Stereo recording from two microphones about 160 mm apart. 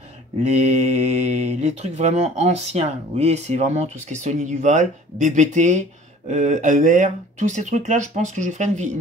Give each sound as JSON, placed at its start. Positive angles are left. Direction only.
{"t": 0.4, "sound": "speech", "side_deg": -45}